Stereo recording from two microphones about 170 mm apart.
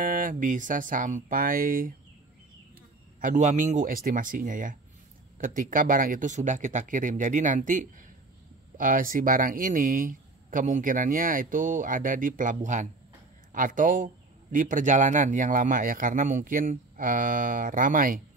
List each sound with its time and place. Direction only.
0.0 s speech: 50° right (ahead or behind)
3.2 s speech: 50° right (ahead or behind)